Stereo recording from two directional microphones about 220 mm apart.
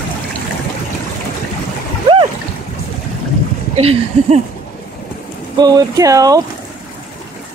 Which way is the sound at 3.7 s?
30° right (ahead or behind).